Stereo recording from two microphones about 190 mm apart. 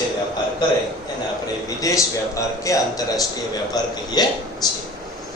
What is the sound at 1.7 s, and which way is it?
A man's voice, 15° left (ahead or behind).